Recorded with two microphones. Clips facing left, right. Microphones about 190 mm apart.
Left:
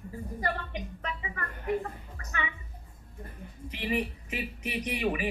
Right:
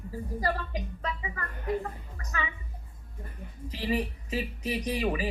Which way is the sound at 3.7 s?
30° right (ahead or behind).